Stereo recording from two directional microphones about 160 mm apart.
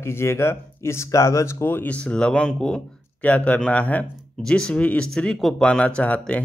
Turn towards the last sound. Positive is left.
turn(degrees=10)  # may be behind; listen again after turning